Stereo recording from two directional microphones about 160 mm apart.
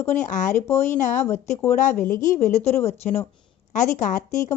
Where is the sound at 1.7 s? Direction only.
60° left (ahead or behind).